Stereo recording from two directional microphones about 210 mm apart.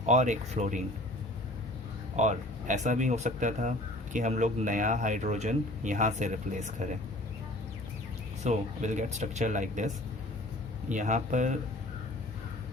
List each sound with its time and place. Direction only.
0.0 s speech: 35° right (ahead or behind)
2.1 s speech: 35° right (ahead or behind)
8.4 s speech: 35° right (ahead or behind)